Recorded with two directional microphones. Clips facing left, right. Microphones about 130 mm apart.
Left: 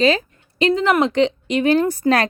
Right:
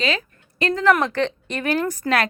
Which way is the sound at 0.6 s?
20° left (ahead or behind).